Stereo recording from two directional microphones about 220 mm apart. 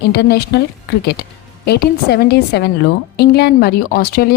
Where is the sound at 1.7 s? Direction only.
45° left (ahead or behind).